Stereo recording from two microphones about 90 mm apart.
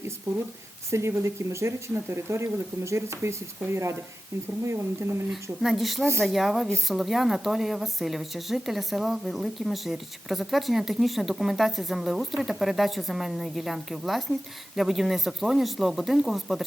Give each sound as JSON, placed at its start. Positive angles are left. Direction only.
{"t": 0.9, "sound": "speech", "side_deg": -30}
{"t": 5.3, "sound": "a woman's voice", "side_deg": 0}